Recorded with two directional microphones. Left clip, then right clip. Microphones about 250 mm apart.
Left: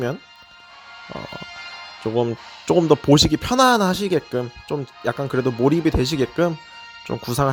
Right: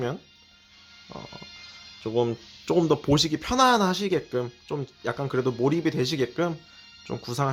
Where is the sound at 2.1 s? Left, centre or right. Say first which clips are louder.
Left 3 dB; left.